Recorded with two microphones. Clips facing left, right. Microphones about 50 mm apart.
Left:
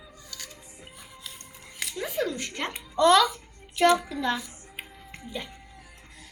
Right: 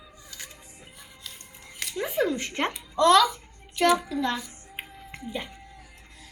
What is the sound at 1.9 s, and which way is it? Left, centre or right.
Speech, centre.